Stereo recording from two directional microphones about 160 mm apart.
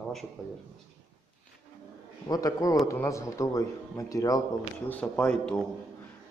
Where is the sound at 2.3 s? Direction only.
20° left (ahead or behind).